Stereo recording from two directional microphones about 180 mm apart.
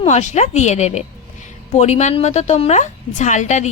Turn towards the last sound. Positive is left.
turn(degrees=40)  # may be behind; listen again after turning